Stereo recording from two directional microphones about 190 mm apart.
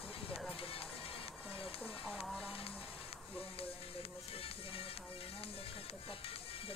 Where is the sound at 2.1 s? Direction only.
Centre (ahead or behind).